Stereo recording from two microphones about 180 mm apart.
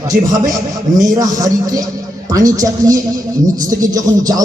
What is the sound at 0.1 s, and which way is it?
Speech, 55° right (ahead or behind).